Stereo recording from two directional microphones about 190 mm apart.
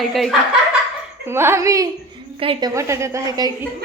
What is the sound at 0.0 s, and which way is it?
Speech, centre (ahead or behind).